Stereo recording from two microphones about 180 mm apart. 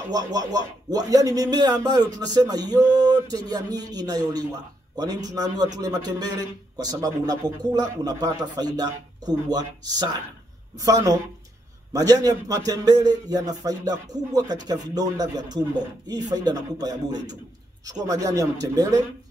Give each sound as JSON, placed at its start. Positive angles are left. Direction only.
{"t": 0.1, "sound": "a man's voice", "side_deg": -20}